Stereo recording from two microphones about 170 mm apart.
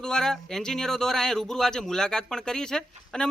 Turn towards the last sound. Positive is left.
turn(degrees=5)  # may be behind; listen again after turning